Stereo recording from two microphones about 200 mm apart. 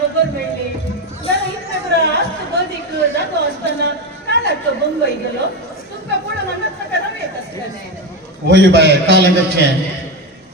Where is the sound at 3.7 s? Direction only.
60° right (ahead or behind).